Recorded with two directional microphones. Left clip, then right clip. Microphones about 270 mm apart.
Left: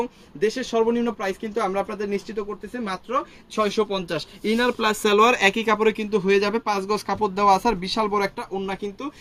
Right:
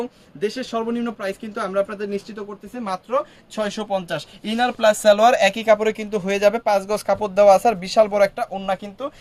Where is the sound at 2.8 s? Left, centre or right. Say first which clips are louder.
Right 4 dB; centre; by 8.8 s right.